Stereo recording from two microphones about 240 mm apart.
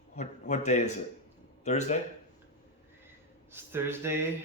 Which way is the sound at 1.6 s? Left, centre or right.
Left.